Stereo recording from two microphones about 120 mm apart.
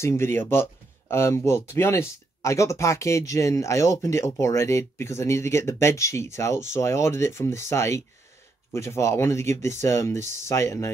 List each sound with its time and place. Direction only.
0.0 s speech: 20° left (ahead or behind)